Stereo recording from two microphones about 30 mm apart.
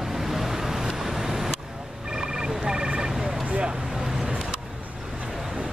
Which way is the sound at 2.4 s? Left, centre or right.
Right.